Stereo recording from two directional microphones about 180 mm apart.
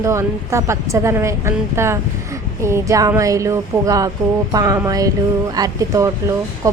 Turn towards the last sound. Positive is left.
turn(degrees=-20)  # may be behind; listen again after turning